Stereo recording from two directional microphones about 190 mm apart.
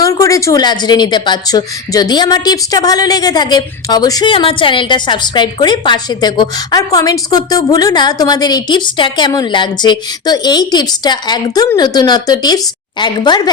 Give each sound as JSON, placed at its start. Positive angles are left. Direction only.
{"t": 0.0, "sound": "speech", "side_deg": 15}